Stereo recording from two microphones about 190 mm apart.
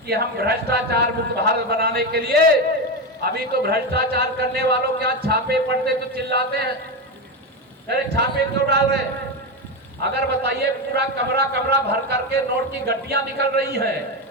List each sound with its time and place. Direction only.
0.1 s a man's voice: 55° right (ahead or behind)
7.9 s a man's voice: 55° right (ahead or behind)